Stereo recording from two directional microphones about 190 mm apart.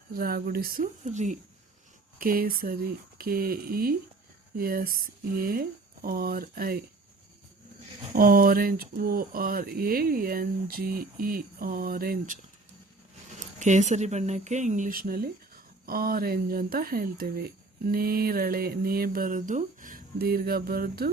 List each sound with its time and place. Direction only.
0.1 s speech: 50° right (ahead or behind)
1.0 s speech: 40° right (ahead or behind)
8.1 s speech: 50° right (ahead or behind)
13.6 s speech: 40° right (ahead or behind)